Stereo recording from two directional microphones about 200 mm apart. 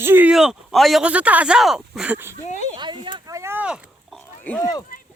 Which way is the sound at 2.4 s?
35° left (ahead or behind).